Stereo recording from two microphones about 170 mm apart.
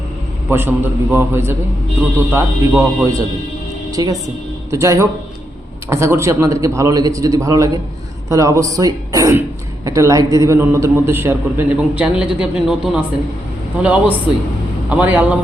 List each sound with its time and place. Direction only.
0.4 s a man's voice: 15° right (ahead or behind)